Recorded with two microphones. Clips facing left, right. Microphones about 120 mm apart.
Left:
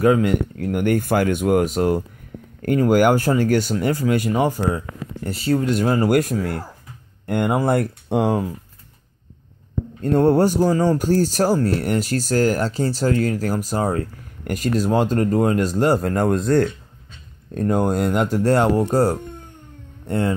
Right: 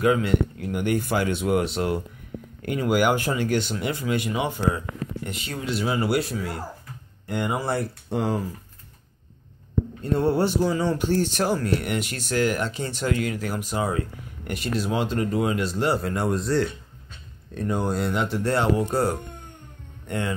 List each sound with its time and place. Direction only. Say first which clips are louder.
0.0 s speech: left 4 dB; 40° left (ahead or behind); by 8.5 s 60° left (ahead or behind)
10.1 s speech: left 6 dB; 45° left (ahead or behind)